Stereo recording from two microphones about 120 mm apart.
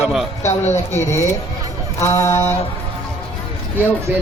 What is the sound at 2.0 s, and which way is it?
Speech, 25° left (ahead or behind).